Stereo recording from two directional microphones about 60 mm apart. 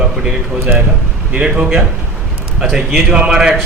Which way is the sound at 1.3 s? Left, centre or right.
Centre.